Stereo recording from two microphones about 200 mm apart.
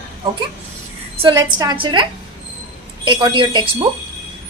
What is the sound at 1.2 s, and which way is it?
Speech, 20° right (ahead or behind).